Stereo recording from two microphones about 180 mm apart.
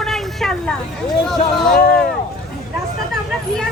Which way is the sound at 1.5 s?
Centre (ahead or behind).